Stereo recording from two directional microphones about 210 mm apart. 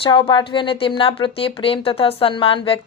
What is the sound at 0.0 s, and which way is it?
Speech, 25° left (ahead or behind).